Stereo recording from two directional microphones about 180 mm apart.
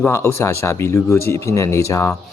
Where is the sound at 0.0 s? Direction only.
15° left (ahead or behind).